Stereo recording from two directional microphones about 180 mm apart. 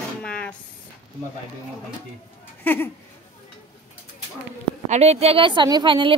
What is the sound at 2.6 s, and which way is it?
Speech, 10° left (ahead or behind).